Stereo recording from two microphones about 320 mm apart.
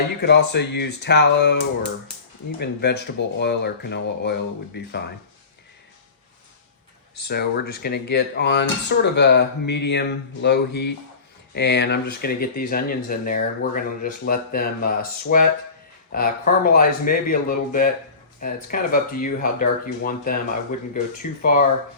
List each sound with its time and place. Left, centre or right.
0.2 s speech: left
7.3 s speech: left